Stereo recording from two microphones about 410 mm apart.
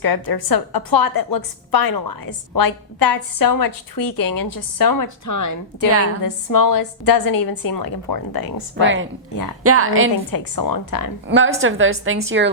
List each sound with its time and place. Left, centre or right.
0.0 s a woman's voice: left
5.0 s a woman's voice: left
8.8 s a woman's voice: right
10.3 s a woman's voice: left
11.3 s a woman's voice: right